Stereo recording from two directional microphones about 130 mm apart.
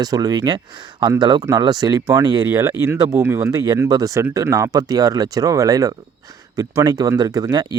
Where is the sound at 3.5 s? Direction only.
30° right (ahead or behind).